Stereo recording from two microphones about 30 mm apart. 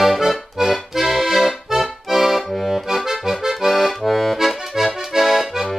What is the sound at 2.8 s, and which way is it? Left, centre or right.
Accordion, centre.